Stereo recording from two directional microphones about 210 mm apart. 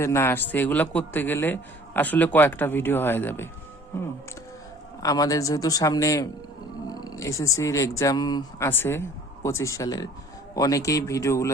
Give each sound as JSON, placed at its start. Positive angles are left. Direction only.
{"t": 0.0, "sound": "a man's voice", "side_deg": 10}
{"t": 5.0, "sound": "a man's voice", "side_deg": 15}
{"t": 6.8, "sound": "roaring cats", "side_deg": 20}
{"t": 7.6, "sound": "a man's voice", "side_deg": 15}